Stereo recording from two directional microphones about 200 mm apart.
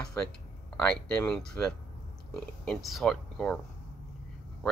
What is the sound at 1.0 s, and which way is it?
Speech, 5° left (ahead or behind).